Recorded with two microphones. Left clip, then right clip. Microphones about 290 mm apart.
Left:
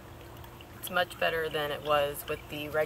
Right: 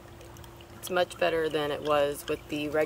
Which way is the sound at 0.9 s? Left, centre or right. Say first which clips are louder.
Right 2 dB; right.